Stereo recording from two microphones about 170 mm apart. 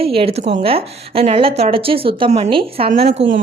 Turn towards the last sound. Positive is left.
turn(degrees=-40)  # may be behind; listen again after turning